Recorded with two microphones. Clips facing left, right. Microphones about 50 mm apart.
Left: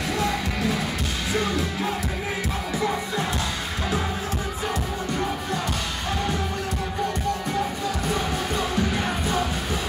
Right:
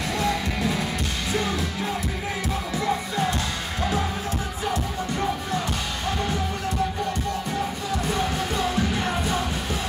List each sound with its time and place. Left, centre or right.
0.2 s music: centre
8.1 s music: centre